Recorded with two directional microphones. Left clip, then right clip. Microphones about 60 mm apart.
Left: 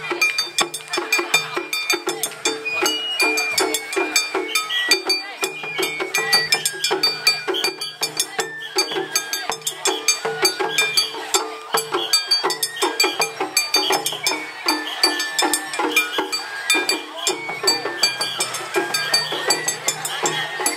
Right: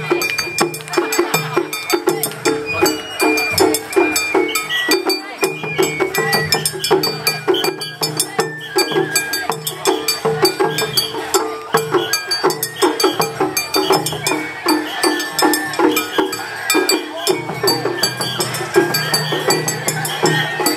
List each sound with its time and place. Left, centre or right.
0.6 s music: left
12.0 s a sound: left
13.6 s music: left